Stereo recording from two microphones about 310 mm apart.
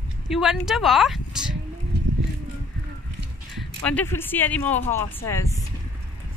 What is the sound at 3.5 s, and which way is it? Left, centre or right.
Speech, centre.